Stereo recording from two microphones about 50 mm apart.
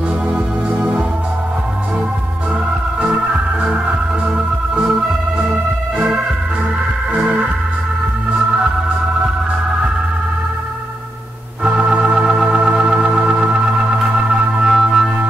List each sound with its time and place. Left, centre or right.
3.6 s music: centre
11.6 s organ: right
14.5 s music: centre